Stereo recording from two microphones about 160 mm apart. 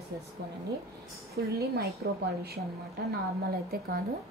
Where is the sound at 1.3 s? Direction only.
80° right.